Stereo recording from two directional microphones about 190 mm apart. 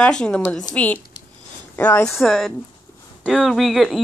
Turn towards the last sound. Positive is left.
turn(degrees=0)  # may be behind; listen again after turning